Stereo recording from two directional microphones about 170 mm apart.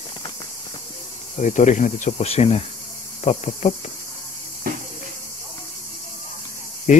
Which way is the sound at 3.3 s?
40° left (ahead or behind).